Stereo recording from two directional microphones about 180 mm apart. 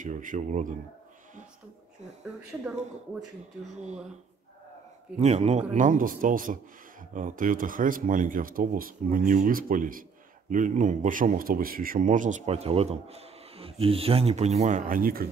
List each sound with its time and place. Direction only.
0.0 s speech: 45° right (ahead or behind)
5.2 s speech: 35° right (ahead or behind)